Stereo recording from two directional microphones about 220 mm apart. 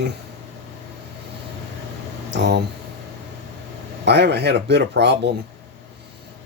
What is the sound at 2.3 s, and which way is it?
Speech, 50° right (ahead or behind).